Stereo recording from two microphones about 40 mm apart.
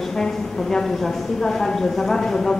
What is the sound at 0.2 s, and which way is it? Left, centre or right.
Speech, centre.